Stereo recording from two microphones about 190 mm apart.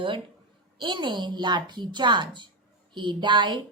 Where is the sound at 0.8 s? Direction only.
25° right (ahead or behind).